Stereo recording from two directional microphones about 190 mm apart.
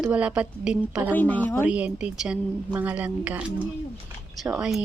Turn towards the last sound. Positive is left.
turn(degrees=-5)  # may be behind; listen again after turning